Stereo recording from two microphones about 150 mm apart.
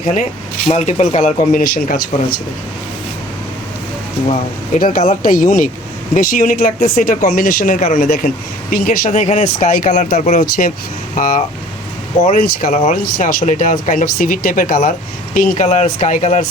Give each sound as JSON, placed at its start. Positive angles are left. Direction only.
{"t": 0.7, "sound": "speech", "side_deg": 50}
{"t": 4.8, "sound": "speech", "side_deg": 65}